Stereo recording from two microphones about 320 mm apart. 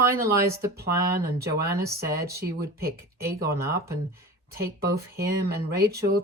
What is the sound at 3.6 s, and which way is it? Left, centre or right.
Speech, centre.